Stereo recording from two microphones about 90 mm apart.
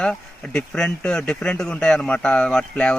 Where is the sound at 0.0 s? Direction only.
10° left (ahead or behind).